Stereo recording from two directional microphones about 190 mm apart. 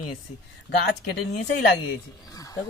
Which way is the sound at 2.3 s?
20° left (ahead or behind).